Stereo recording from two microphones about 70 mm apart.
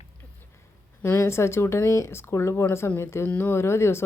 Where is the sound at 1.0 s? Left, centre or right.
Left.